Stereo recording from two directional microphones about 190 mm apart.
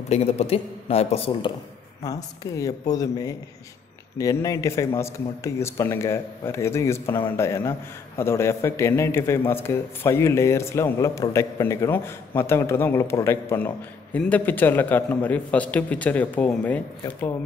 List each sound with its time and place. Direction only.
0.1 s a man's voice: 35° left (ahead or behind)
2.0 s a man's voice: 20° left (ahead or behind)